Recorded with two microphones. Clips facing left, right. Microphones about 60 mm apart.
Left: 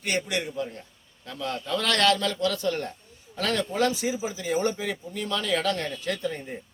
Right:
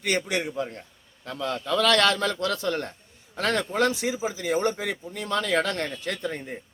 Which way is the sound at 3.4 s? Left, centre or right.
Right.